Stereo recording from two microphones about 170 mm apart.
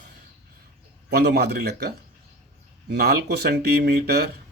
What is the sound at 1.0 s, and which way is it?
Speech, 75° right (ahead or behind).